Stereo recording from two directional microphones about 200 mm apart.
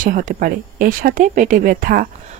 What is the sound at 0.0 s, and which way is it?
Speech, 40° right (ahead or behind).